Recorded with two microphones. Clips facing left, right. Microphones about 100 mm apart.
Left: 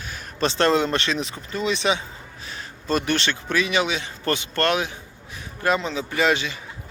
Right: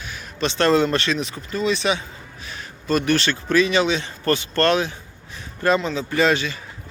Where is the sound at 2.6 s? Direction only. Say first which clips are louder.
Right 2 dB; 30° left (ahead or behind).